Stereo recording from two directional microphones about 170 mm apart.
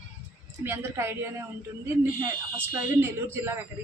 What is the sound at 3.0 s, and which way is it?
Speech, 15° right (ahead or behind).